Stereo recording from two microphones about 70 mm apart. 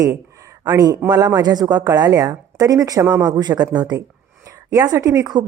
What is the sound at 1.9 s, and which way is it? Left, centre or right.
A woman's voice, right.